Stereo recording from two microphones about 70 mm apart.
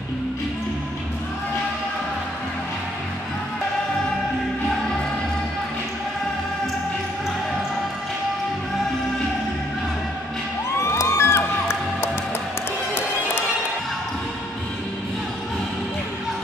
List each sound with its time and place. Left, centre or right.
10.8 s music: left